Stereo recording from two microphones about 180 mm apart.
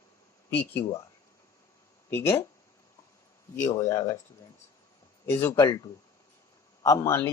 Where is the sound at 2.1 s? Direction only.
15° left (ahead or behind).